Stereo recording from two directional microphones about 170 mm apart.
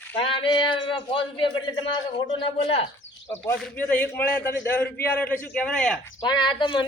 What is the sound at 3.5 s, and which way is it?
A man's voice, 10° left (ahead or behind).